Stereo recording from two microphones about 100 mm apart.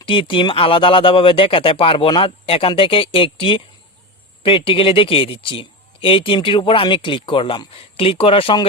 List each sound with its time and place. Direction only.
0.0 s speech: 60° left (ahead or behind)